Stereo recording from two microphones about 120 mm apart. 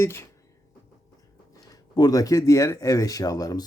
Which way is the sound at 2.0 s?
30° left (ahead or behind).